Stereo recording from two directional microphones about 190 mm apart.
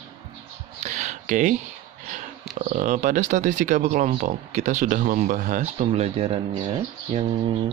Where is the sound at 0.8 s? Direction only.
40° right (ahead or behind).